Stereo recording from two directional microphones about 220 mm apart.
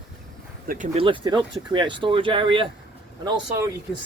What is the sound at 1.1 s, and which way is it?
Speech, 20° right (ahead or behind).